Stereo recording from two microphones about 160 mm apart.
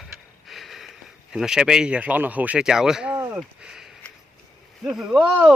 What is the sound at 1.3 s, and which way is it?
Speech, 5° right (ahead or behind).